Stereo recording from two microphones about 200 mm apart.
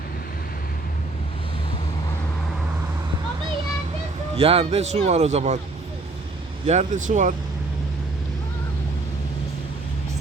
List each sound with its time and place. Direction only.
4.4 s speech: 30° right (ahead or behind)
6.7 s speech: 35° right (ahead or behind)